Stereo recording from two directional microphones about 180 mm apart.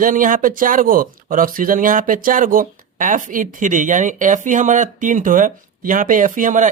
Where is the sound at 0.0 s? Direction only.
50° right (ahead or behind).